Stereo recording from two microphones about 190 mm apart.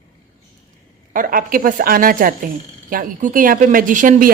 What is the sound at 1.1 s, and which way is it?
Speech, 45° right (ahead or behind).